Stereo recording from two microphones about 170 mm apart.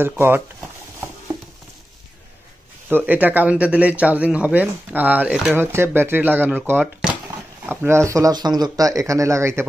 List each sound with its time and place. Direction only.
0.0 s speech: 10° right (ahead or behind)
3.1 s speech: 10° right (ahead or behind)